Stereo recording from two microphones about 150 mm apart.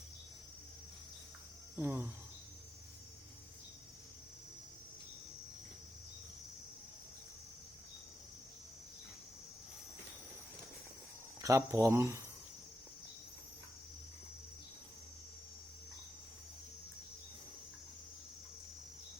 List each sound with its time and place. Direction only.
1.7 s cricket: 15° right (ahead or behind)
11.3 s speech: 20° right (ahead or behind)